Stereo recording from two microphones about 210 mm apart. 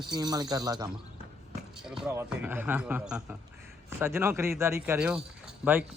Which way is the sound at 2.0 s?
10° right (ahead or behind).